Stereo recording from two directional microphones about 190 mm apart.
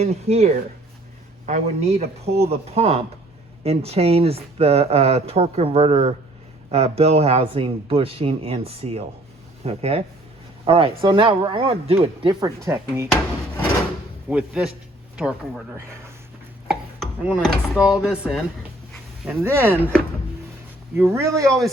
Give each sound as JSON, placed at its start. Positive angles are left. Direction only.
{"t": 0.0, "sound": "speech", "side_deg": -35}
{"t": 12.6, "sound": "speech", "side_deg": -15}
{"t": 14.3, "sound": "speech", "side_deg": -5}
{"t": 16.6, "sound": "speech", "side_deg": -5}
{"t": 21.0, "sound": "speech", "side_deg": -15}